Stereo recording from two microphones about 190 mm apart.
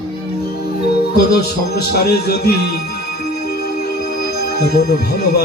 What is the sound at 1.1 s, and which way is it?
Speech, 55° left (ahead or behind).